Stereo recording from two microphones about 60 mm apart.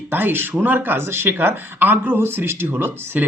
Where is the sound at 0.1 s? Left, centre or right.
Right.